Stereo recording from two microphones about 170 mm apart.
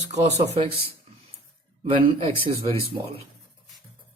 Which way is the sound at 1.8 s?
30° right (ahead or behind).